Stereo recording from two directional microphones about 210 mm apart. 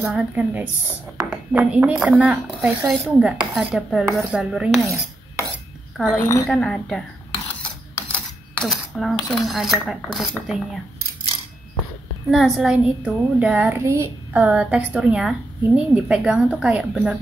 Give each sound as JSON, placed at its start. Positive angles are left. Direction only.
{"t": 0.0, "sound": "a woman's voice", "side_deg": 0}
{"t": 5.9, "sound": "a woman's voice", "side_deg": 5}
{"t": 6.2, "sound": "a woman's voice", "side_deg": 15}
{"t": 6.5, "sound": "a woman's voice", "side_deg": 5}
{"t": 12.3, "sound": "a woman's voice", "side_deg": 0}